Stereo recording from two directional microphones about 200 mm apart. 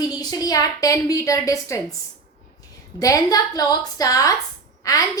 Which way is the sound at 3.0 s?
15° left (ahead or behind).